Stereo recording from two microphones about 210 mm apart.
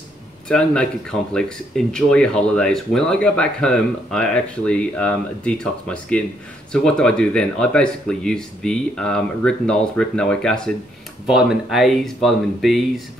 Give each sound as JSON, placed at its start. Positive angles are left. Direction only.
{"t": 0.5, "sound": "speech", "side_deg": 5}